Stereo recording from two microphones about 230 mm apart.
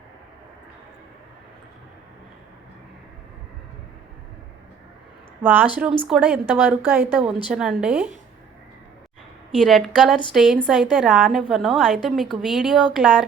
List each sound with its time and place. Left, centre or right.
5.4 s a woman's voice: centre
9.6 s a woman's voice: centre